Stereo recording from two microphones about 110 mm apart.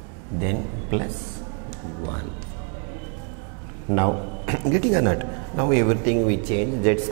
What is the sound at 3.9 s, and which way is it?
A man's voice, 20° right (ahead or behind).